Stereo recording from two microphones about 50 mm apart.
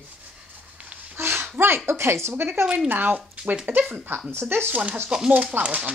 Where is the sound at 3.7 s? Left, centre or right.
Right.